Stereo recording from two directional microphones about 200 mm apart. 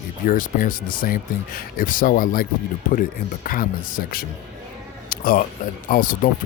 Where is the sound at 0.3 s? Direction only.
40° left (ahead or behind).